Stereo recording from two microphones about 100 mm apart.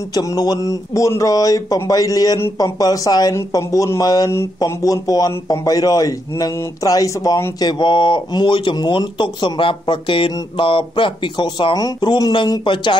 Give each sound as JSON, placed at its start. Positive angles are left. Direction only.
{"t": 0.1, "sound": "a man's voice", "side_deg": 40}
{"t": 7.6, "sound": "speech", "side_deg": 50}